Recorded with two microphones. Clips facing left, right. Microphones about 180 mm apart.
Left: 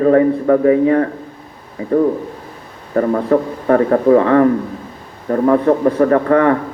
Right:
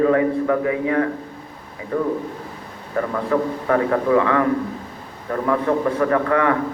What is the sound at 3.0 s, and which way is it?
A man's voice, 35° left (ahead or behind).